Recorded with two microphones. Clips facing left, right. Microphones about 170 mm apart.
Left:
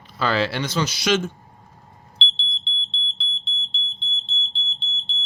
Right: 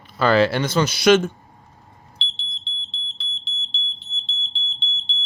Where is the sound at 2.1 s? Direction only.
Centre (ahead or behind).